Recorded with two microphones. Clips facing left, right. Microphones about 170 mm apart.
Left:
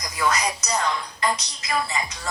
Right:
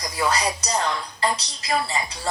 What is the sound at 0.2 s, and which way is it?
Music, 30° right (ahead or behind).